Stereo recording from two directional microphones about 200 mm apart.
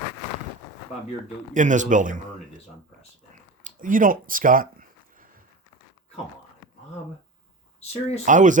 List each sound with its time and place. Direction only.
1.5 s speech: 40° right (ahead or behind)
3.6 s a sound: 40° right (ahead or behind)
7.8 s speech: 30° left (ahead or behind)
8.2 s speech: 40° right (ahead or behind)